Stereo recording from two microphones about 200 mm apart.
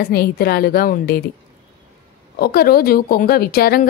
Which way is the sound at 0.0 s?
50° left (ahead or behind).